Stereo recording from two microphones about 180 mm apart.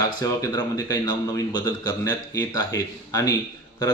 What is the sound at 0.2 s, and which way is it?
Speech, 20° left (ahead or behind).